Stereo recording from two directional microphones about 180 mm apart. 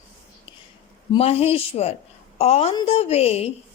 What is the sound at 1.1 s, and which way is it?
A woman's voice, 35° left (ahead or behind).